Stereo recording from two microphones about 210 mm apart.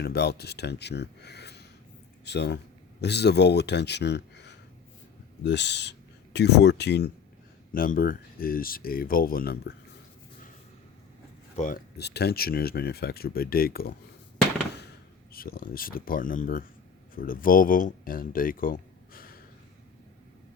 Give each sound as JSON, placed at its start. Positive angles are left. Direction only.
{"t": 0.0, "sound": "speech", "side_deg": 50}
{"t": 7.7, "sound": "speech", "side_deg": 40}
{"t": 11.5, "sound": "speech", "side_deg": 35}
{"t": 11.9, "sound": "speech", "side_deg": 50}
{"t": 15.3, "sound": "speech", "side_deg": 45}